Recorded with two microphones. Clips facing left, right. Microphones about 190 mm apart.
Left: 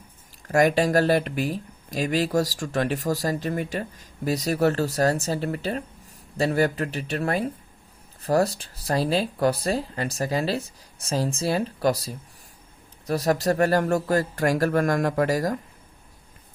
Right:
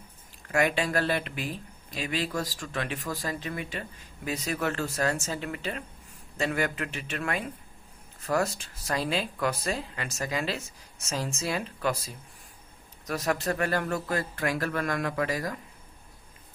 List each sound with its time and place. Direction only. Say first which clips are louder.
0.4 s speech: left 7 dB; 40° left (ahead or behind)